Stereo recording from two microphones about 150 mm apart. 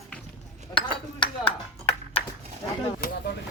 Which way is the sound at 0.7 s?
35° left (ahead or behind).